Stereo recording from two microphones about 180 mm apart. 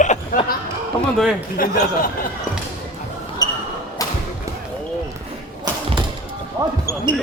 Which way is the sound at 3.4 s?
20° left (ahead or behind).